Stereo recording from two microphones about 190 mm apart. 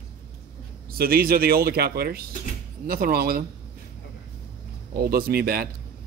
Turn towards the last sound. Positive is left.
turn(degrees=-55)  # may be behind; listen again after turning